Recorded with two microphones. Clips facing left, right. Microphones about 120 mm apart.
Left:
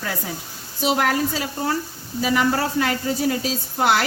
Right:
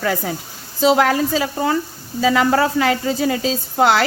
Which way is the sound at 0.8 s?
90° right.